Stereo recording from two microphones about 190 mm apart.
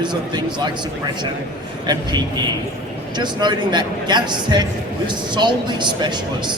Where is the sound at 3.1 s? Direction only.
25° right (ahead or behind).